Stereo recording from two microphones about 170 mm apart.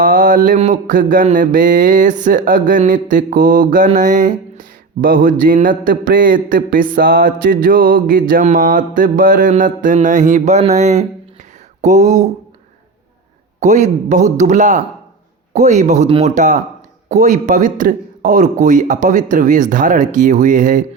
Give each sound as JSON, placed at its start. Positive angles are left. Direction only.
{"t": 0.0, "sound": "mantra", "side_deg": -50}
{"t": 13.6, "sound": "mantra", "side_deg": -45}